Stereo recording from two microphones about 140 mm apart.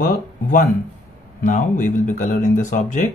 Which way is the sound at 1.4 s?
65° left (ahead or behind).